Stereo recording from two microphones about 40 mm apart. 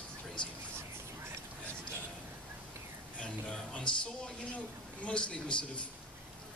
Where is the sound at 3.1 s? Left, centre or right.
Left.